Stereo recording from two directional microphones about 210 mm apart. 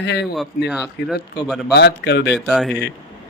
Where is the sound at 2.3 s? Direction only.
Centre (ahead or behind).